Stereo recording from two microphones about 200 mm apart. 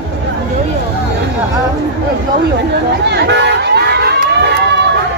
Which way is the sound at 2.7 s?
55° right (ahead or behind).